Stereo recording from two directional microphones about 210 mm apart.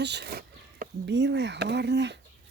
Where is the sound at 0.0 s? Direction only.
55° right (ahead or behind).